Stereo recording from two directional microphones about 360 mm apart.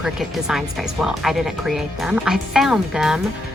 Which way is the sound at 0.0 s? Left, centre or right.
Centre.